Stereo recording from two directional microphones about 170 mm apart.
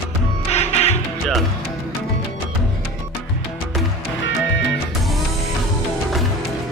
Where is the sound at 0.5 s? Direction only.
40° left (ahead or behind).